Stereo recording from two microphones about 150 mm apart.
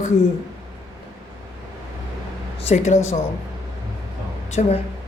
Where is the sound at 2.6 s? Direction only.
50° left (ahead or behind).